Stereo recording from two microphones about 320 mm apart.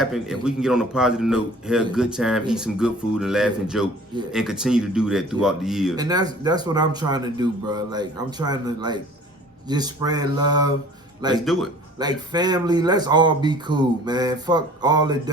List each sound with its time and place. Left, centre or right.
0.0 s speech: centre
6.0 s speech: centre